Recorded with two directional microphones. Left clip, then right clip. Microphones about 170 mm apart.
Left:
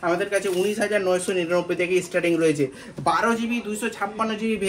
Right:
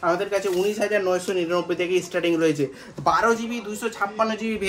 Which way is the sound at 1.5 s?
20° right (ahead or behind).